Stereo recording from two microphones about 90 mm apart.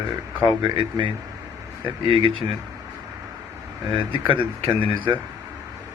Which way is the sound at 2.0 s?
80° right.